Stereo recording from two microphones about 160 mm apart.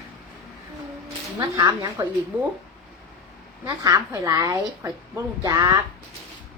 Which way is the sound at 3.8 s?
20° right (ahead or behind).